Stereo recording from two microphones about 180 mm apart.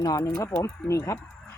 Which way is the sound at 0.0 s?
15° left (ahead or behind).